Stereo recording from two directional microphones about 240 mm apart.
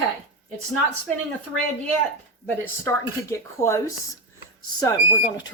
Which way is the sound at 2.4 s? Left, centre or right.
Centre.